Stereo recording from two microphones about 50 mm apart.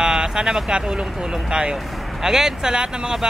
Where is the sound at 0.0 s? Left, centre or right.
Centre.